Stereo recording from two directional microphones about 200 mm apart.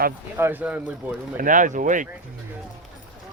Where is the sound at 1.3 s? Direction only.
40° right (ahead or behind).